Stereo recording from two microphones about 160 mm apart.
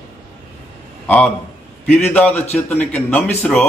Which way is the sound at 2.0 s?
10° left (ahead or behind).